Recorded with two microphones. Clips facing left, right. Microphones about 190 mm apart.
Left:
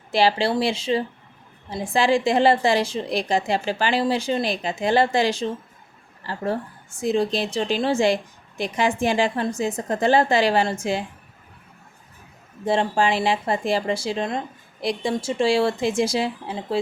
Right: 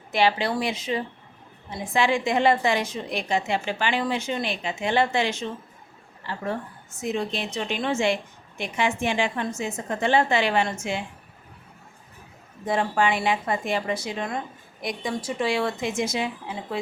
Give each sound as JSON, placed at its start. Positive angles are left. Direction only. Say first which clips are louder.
{"t": 0.1, "sound": "speech", "louder": "left 3 dB", "side_deg": 30}
{"t": 12.6, "sound": "speech", "louder": "left 3 dB", "side_deg": 30}